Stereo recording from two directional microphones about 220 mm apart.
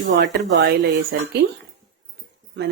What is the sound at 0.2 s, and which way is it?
Speech, 55° right (ahead or behind).